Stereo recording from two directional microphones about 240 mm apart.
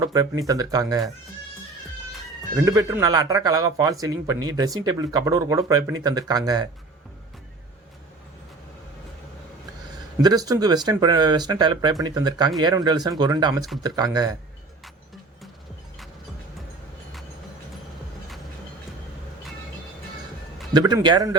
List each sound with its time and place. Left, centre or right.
0.0 s speech: centre
2.6 s speech: centre
10.2 s speech: centre
20.7 s speech: centre